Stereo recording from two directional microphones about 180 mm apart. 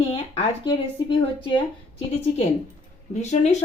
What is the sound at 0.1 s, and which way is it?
Speech, 30° left (ahead or behind).